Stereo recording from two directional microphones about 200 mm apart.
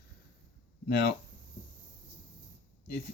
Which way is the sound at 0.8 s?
55° left (ahead or behind).